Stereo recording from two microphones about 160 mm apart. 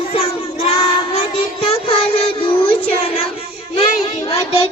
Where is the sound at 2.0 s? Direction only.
35° left (ahead or behind).